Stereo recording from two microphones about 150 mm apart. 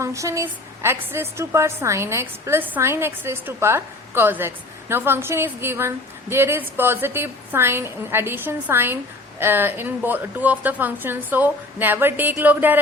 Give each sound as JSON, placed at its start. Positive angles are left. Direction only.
{"t": 0.0, "sound": "a woman's voice", "side_deg": -20}